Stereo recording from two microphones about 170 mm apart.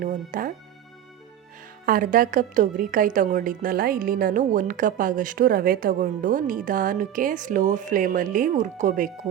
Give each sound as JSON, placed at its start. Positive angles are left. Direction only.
{"t": 0.0, "sound": "a woman's voice", "side_deg": -50}
{"t": 1.9, "sound": "a woman's voice", "side_deg": -55}